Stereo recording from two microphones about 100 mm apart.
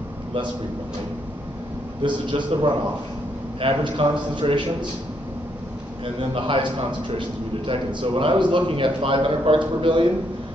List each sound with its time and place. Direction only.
2.0 s a man's voice: 50° right (ahead or behind)
6.3 s a man's voice: 60° right (ahead or behind)